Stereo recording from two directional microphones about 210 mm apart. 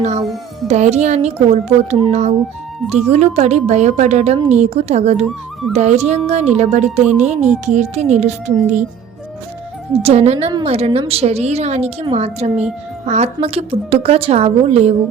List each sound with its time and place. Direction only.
0.0 s a child's voice: 35° right (ahead or behind)
9.9 s a woman's voice: 30° right (ahead or behind)